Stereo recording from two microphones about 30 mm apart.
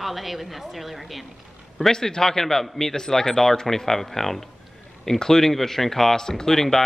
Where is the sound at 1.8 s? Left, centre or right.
Centre.